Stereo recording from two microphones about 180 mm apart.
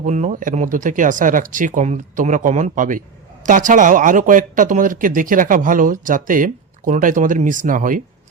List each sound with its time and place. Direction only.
0.0 s speech: 45° right (ahead or behind)